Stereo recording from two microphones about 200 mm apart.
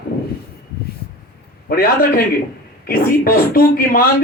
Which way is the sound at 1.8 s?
50° left (ahead or behind).